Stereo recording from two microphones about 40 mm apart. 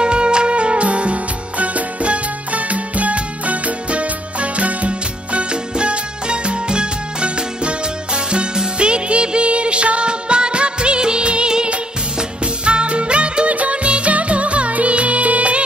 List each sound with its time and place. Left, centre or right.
0.0 s music: right